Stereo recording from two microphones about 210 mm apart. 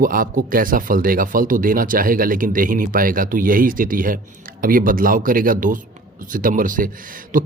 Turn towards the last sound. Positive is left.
turn(degrees=-40)  # may be behind; listen again after turning